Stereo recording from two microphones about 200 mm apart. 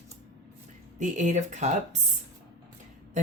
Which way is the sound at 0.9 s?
40° right (ahead or behind).